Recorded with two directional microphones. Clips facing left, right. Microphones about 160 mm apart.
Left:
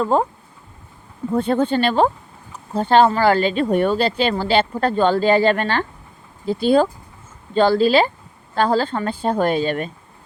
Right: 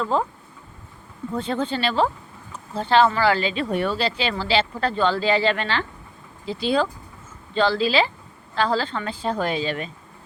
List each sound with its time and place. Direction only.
0.0 s speech: 45° left (ahead or behind)
1.3 s speech: 55° left (ahead or behind)